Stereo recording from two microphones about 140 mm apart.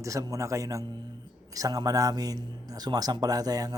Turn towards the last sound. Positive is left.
turn(degrees=-25)  # may be behind; listen again after turning